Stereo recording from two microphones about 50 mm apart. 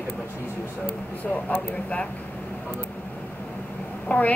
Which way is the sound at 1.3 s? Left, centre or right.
Left.